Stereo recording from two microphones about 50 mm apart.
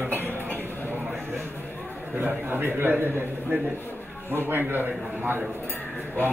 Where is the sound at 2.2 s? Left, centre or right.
Right.